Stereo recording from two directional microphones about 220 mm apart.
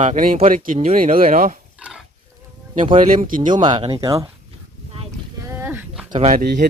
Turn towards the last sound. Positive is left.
turn(degrees=-40)  # may be behind; listen again after turning